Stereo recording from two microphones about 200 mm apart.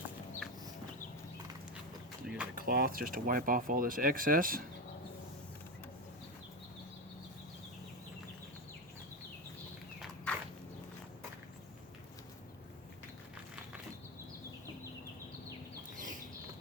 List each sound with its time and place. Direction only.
0.4 s chicken: centre (ahead or behind)
2.2 s speech: 5° right (ahead or behind)
2.6 s speech: 50° right (ahead or behind)
10.3 s walk: 5° left (ahead or behind)